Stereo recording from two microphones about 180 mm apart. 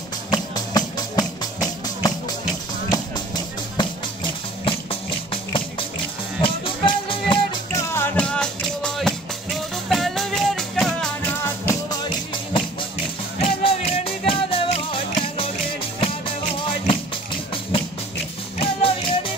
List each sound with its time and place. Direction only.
0.3 s music: 20° left (ahead or behind)
3.7 s music: 25° left (ahead or behind)
7.9 s music: 10° left (ahead or behind)
11.4 s music: 15° left (ahead or behind)
13.4 s music: 35° left (ahead or behind)
18.6 s music: 30° left (ahead or behind)